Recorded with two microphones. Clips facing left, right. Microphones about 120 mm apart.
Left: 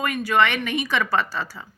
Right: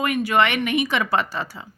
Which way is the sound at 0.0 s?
20° right (ahead or behind).